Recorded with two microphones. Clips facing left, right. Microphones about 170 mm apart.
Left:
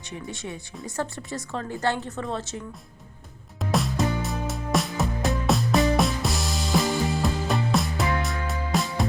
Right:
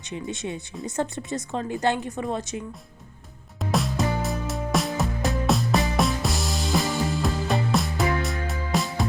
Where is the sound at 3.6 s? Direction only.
Centre (ahead or behind).